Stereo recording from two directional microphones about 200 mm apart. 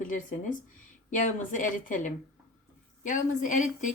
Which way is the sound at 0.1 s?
40° left (ahead or behind).